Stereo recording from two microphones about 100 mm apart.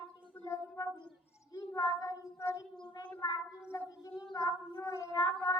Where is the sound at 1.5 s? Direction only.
35° left (ahead or behind).